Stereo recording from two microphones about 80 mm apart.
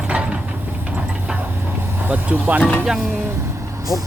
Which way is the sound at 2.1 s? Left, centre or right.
Right.